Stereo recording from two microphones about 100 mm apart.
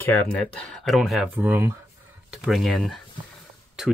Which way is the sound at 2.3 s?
Centre (ahead or behind).